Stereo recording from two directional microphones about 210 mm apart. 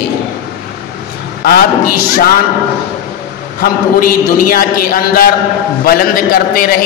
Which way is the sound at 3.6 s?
45° left (ahead or behind).